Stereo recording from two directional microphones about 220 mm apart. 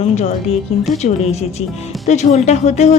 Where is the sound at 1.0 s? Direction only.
30° left (ahead or behind).